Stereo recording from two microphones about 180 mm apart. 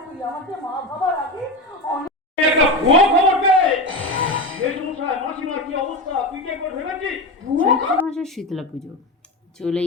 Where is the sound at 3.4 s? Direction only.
90° right.